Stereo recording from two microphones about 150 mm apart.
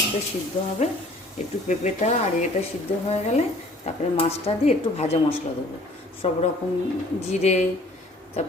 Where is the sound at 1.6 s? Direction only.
50° left (ahead or behind).